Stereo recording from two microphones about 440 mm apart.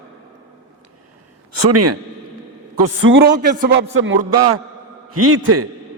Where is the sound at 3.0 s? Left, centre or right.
Right.